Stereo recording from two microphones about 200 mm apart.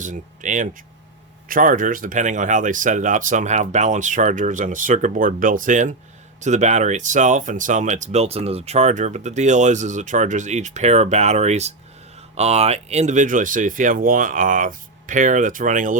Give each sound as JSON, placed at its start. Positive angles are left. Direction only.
{"t": 0.0, "sound": "speech", "side_deg": -40}